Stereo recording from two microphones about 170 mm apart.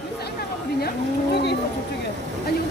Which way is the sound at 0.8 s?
75° left (ahead or behind).